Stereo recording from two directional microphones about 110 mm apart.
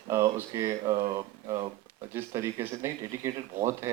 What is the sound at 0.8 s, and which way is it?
Speech, 40° right (ahead or behind).